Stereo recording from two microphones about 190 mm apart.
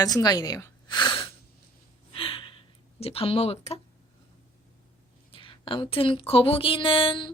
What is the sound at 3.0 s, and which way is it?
Speech, 30° left (ahead or behind).